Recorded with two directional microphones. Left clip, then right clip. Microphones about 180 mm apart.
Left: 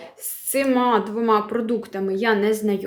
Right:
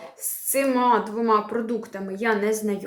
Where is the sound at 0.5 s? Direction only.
30° left (ahead or behind).